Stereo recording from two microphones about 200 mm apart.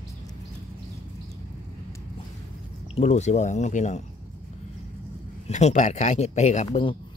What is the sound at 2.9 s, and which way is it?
Speech, 35° left (ahead or behind).